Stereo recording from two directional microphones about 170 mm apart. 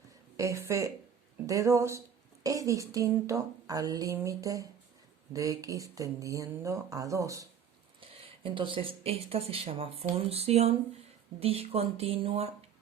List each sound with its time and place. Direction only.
0.3 s a woman's voice: 20° right (ahead or behind)
8.2 s speech: 30° right (ahead or behind)